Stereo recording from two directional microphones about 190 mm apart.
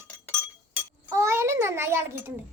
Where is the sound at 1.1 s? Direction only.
15° right (ahead or behind).